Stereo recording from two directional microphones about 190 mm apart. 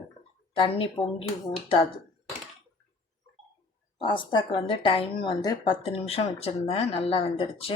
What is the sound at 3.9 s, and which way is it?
A woman's voice, 25° left (ahead or behind).